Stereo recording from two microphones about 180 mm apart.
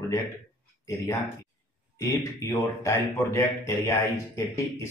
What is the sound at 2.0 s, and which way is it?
Speech, 15° left (ahead or behind).